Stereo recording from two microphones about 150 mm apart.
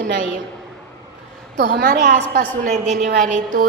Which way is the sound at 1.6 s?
70° right (ahead or behind).